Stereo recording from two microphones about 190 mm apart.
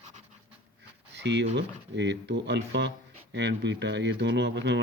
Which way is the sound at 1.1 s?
65° right (ahead or behind).